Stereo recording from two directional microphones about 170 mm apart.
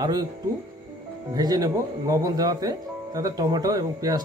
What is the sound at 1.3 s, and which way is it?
Speech, 20° right (ahead or behind).